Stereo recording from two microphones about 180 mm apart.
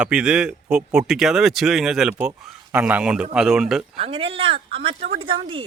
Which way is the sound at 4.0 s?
30° right (ahead or behind).